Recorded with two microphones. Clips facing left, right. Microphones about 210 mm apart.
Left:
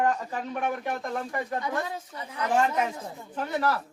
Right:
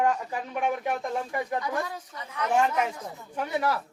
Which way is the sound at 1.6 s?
25° left (ahead or behind).